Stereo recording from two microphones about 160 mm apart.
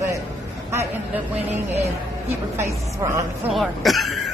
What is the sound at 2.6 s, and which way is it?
Speech, 20° right (ahead or behind).